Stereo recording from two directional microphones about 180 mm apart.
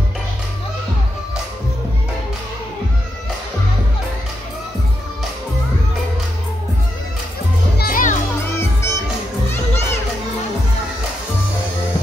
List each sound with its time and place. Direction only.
7.7 s music: 55° left (ahead or behind)
8.5 s music: 15° left (ahead or behind)
9.5 s children playing: 15° left (ahead or behind)